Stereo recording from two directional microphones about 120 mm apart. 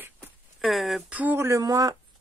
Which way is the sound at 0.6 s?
Centre (ahead or behind).